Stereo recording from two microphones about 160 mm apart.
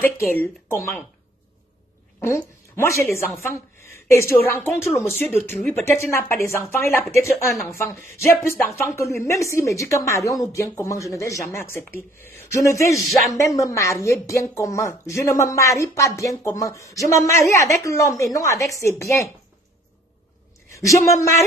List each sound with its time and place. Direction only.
0.0 s speech: 10° left (ahead or behind)
2.1 s a woman's voice: 15° left (ahead or behind)
20.7 s a woman's voice: 20° left (ahead or behind)